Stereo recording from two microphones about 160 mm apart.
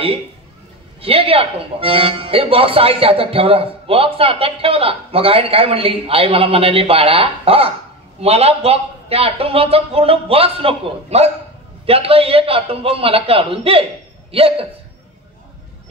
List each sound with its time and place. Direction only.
1.0 s speech: 35° right (ahead or behind)